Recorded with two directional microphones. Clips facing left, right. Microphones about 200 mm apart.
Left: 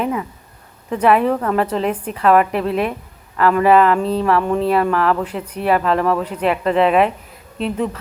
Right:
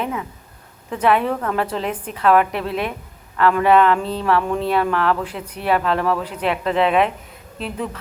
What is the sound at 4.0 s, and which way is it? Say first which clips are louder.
Speech: left 6 dB; 35° left (ahead or behind).